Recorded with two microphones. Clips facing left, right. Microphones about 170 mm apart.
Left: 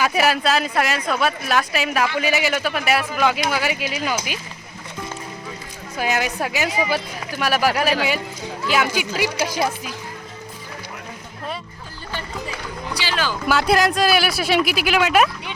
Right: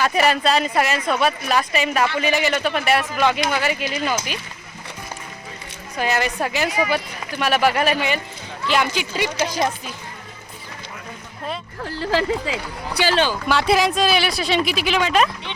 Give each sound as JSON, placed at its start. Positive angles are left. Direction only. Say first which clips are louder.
{"t": 0.0, "sound": "speech", "louder": "right 1 dB", "side_deg": 5}
{"t": 6.0, "sound": "speech", "louder": "right 1 dB", "side_deg": 5}
{"t": 11.8, "sound": "speech", "louder": "right 11 dB", "side_deg": -90}
{"t": 13.0, "sound": "speech", "louder": "right 9 dB", "side_deg": -50}
{"t": 13.5, "sound": "speech", "louder": "left 3 dB", "side_deg": 0}